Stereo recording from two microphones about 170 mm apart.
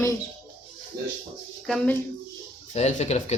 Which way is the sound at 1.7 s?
Centre (ahead or behind).